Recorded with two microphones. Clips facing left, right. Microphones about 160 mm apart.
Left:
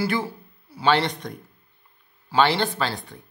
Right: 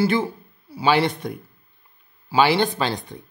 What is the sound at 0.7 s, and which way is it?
Speech, 10° right (ahead or behind).